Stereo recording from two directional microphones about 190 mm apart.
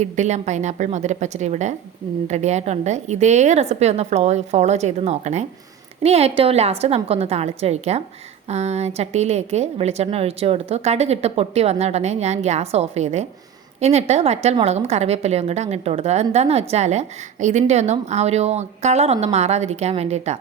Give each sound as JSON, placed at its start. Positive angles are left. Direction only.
{"t": 0.0, "sound": "a woman's voice", "side_deg": -35}